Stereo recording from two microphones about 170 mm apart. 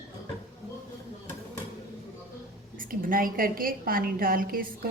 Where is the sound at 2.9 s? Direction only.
55° right (ahead or behind).